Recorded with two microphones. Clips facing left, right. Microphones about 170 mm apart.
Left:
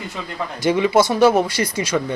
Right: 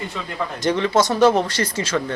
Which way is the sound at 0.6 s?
10° left (ahead or behind).